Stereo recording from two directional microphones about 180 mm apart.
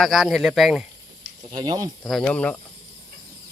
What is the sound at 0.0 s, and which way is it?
Speech, centre (ahead or behind).